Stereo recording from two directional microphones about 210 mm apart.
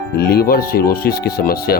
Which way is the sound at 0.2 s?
50° left (ahead or behind).